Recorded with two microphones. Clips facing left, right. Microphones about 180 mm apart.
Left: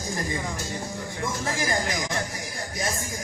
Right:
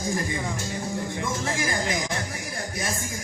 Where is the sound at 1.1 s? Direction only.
20° right (ahead or behind).